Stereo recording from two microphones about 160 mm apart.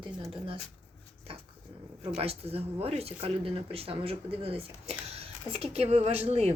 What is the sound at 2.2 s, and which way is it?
Speech, 40° right (ahead or behind).